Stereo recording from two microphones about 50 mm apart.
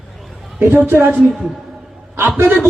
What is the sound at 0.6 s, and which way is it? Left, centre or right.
Speech, right.